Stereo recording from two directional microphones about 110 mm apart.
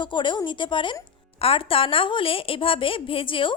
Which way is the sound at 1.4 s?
60° left (ahead or behind).